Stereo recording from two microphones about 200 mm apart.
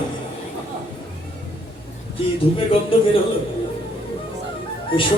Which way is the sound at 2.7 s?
25° left (ahead or behind).